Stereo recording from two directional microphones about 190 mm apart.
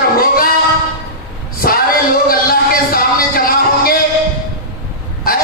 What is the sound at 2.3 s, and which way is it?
Music, 50° left (ahead or behind).